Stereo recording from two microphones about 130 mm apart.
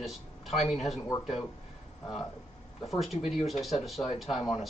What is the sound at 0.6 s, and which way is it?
Speech, 60° left (ahead or behind).